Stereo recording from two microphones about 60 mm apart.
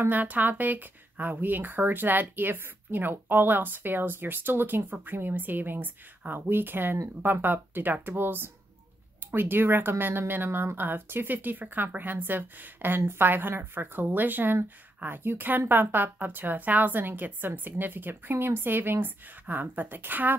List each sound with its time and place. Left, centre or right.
0.0 s speech: right